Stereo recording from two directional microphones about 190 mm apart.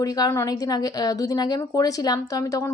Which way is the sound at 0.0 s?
20° left (ahead or behind).